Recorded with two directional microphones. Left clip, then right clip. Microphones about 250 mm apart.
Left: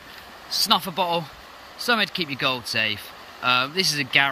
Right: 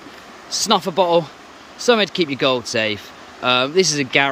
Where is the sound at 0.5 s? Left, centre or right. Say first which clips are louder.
Right 3 dB; centre.